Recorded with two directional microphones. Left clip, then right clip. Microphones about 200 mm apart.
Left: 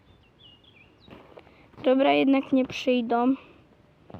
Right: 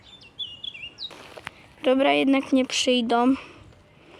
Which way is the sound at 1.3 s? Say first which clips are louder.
Right 9 dB; centre (ahead or behind).